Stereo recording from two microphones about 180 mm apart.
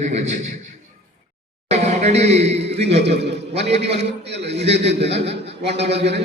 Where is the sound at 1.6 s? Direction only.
35° right (ahead or behind).